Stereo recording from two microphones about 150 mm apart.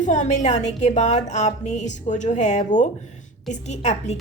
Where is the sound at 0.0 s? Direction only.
55° left (ahead or behind).